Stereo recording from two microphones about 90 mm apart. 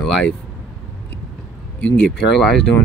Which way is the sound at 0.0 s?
5° left (ahead or behind).